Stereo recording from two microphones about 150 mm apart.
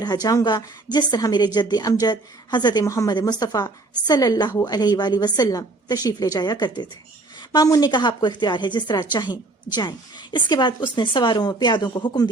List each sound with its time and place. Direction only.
0.0 s speech: 25° left (ahead or behind)